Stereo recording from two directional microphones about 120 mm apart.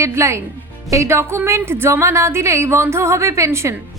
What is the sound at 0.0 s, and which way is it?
A woman's voice, 25° right (ahead or behind).